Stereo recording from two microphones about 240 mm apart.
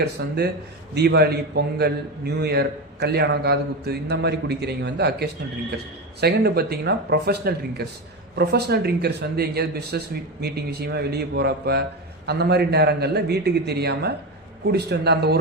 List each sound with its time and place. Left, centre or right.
0.0 s a man's voice: right